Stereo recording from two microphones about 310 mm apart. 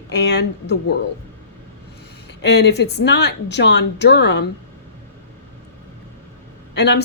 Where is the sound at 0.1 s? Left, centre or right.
Left.